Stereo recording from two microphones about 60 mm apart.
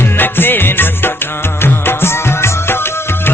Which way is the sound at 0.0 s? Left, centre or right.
Left.